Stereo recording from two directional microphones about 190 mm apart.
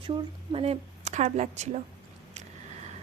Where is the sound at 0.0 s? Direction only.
30° right (ahead or behind).